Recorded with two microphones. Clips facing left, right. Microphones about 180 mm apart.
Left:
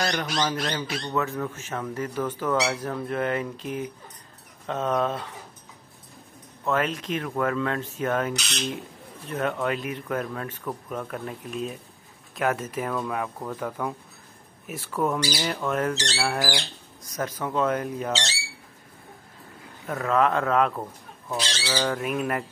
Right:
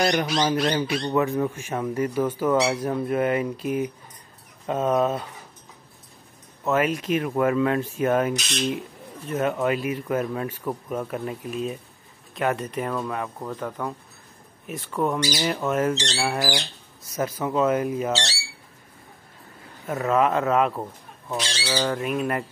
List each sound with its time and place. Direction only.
0.0 s speech: 15° right (ahead or behind)
6.6 s speech: 10° right (ahead or behind)
15.3 s speech: 10° right (ahead or behind)
19.9 s speech: 5° right (ahead or behind)